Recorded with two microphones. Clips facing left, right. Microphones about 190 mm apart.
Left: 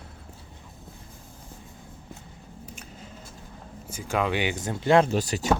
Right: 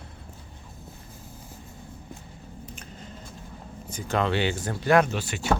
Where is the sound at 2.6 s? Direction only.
10° left (ahead or behind).